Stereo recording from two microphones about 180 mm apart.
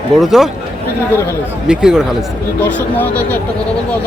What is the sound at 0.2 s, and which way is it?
Speech, centre (ahead or behind).